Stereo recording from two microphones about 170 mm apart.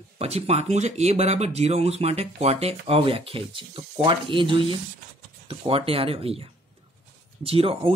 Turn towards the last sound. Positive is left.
turn(degrees=-35)  # may be behind; listen again after turning